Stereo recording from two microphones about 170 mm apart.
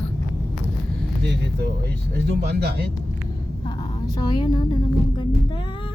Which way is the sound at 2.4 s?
70° right (ahead or behind).